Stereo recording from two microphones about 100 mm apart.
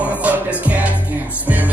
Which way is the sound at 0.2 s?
15° right (ahead or behind).